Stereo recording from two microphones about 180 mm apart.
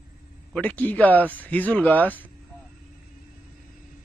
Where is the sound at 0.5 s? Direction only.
10° left (ahead or behind).